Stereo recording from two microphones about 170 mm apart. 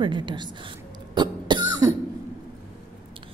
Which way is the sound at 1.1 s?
25° right (ahead or behind).